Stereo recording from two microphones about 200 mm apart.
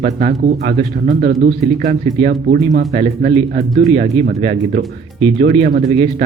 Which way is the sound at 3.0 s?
35° right (ahead or behind).